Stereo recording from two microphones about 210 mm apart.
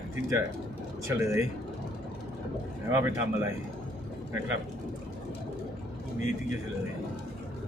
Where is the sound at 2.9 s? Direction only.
10° right (ahead or behind).